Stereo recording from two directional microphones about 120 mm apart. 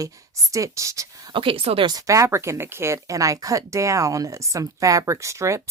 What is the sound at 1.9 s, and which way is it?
Speech, 30° right (ahead or behind).